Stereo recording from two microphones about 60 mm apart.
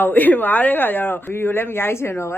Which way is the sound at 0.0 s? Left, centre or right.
Left.